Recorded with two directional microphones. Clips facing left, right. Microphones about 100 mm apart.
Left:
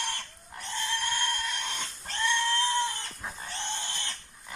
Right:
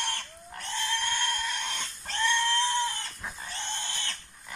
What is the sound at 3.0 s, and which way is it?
Pig, 20° left (ahead or behind).